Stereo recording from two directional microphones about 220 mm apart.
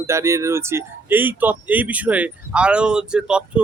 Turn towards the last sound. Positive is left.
turn(degrees=-5)  # may be behind; listen again after turning